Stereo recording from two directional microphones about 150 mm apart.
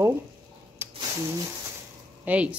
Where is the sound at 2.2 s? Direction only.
10° right (ahead or behind).